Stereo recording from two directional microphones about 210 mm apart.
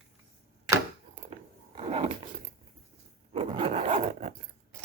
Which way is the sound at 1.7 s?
30° right (ahead or behind).